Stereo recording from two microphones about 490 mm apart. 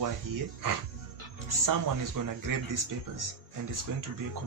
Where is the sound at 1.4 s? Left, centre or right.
Right.